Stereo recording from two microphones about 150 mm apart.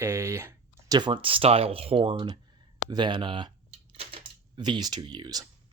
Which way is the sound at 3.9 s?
40° right (ahead or behind).